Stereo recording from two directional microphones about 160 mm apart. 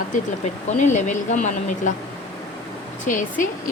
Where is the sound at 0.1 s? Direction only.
45° left (ahead or behind).